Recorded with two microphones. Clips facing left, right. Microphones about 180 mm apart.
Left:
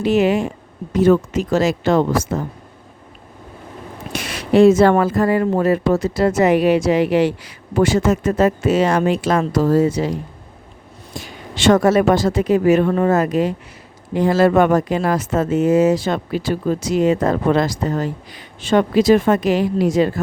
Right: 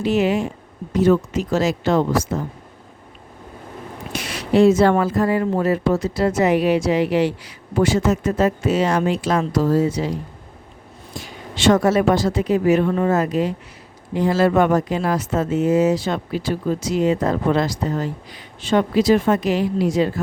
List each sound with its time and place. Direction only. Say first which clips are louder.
0.0 s speech: left 3 dB; 60° left (ahead or behind)
4.2 s speech: left 3 dB; 55° left (ahead or behind)
11.7 s speech: left 3 dB; 55° left (ahead or behind)